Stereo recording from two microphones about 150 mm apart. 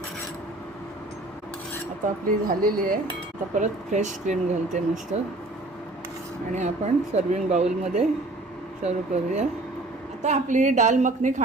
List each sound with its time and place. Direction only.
2.2 s speech: 70° right (ahead or behind)
3.5 s speech: 55° right (ahead or behind)
6.5 s speech: 50° right (ahead or behind)